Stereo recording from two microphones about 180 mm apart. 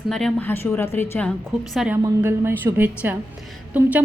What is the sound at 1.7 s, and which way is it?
A woman's voice, 5° right (ahead or behind).